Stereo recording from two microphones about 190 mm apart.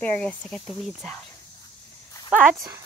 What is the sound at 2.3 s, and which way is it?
Speech, 10° right (ahead or behind).